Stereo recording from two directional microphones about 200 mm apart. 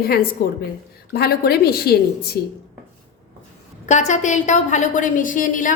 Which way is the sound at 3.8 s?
35° left (ahead or behind).